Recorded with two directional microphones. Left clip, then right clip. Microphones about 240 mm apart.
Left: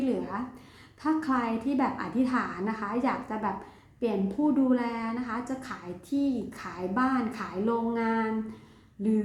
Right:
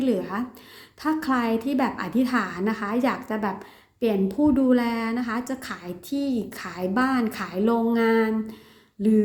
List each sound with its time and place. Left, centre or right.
0.0 s a woman's voice: right